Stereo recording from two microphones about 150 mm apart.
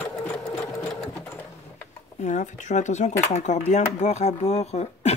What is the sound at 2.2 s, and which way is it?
Speech, 55° left (ahead or behind).